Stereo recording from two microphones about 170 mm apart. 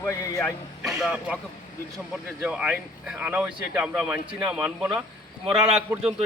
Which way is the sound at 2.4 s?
5° right (ahead or behind).